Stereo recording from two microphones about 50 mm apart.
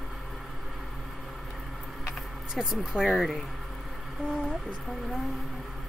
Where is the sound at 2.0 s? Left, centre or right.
Centre.